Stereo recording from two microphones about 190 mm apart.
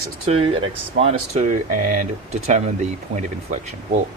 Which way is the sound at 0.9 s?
35° right (ahead or behind).